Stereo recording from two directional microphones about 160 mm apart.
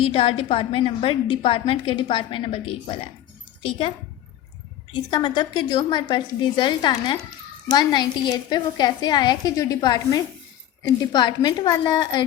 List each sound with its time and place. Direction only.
0.0 s a woman's voice: 35° left (ahead or behind)
5.1 s a woman's voice: 30° left (ahead or behind)